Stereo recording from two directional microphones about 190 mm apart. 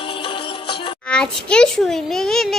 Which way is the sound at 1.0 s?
5° left (ahead or behind).